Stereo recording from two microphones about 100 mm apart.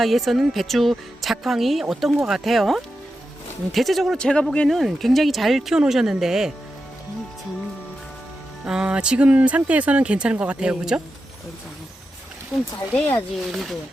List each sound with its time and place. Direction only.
0.0 s speech: centre (ahead or behind)
8.6 s speech: 10° right (ahead or behind)
12.5 s speech: centre (ahead or behind)
12.9 s speech: 15° left (ahead or behind)
13.5 s speech: centre (ahead or behind)